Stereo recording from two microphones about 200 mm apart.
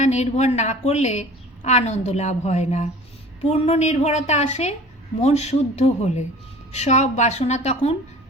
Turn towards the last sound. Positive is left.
turn(degrees=30)  # may be behind; listen again after turning